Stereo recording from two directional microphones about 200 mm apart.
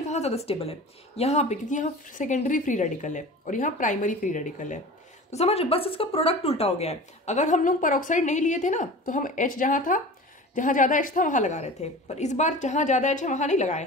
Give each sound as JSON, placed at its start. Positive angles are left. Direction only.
{"t": 0.1, "sound": "speech", "side_deg": 30}